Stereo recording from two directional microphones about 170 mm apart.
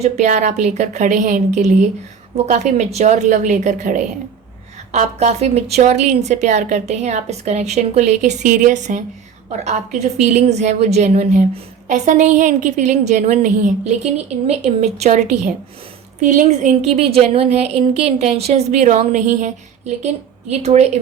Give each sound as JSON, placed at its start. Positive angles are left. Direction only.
{"t": 0.0, "sound": "a woman's voice", "side_deg": -45}